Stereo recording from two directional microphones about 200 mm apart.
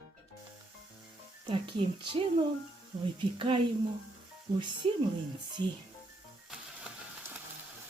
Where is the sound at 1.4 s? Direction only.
25° right (ahead or behind).